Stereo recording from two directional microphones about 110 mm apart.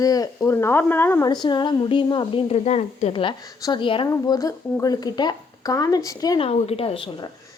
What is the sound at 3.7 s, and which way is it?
Speech, 50° left (ahead or behind).